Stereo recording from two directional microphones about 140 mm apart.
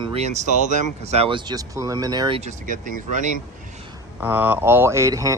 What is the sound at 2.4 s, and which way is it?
Speech, 70° right (ahead or behind).